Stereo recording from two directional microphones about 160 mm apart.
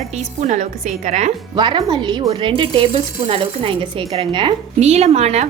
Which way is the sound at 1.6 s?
30° right (ahead or behind).